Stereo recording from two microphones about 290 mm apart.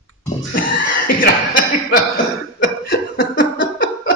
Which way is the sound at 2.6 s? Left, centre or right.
Left.